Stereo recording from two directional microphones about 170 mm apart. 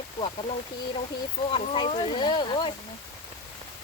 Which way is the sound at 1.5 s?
30° left (ahead or behind).